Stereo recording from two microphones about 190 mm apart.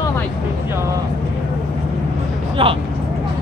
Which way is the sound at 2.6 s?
30° right (ahead or behind).